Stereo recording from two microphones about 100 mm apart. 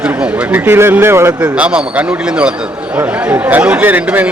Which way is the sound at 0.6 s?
25° right (ahead or behind).